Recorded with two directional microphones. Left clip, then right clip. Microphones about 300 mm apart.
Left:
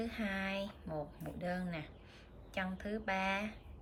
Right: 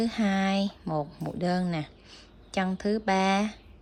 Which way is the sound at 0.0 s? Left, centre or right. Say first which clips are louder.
Right 11 dB; centre.